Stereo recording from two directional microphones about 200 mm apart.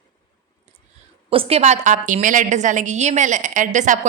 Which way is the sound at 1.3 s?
30° right (ahead or behind).